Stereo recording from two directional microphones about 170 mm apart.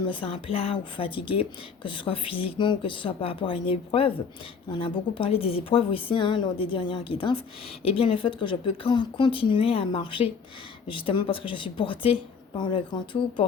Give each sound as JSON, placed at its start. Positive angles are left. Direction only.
{"t": 0.0, "sound": "speech", "side_deg": 30}